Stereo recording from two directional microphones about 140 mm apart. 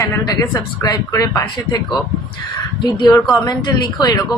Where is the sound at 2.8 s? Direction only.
30° left (ahead or behind).